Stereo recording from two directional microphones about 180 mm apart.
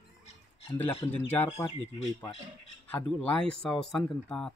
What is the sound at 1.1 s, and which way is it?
Speech, 10° left (ahead or behind).